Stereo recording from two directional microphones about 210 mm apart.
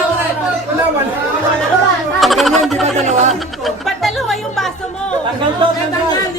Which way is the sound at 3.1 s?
35° right (ahead or behind).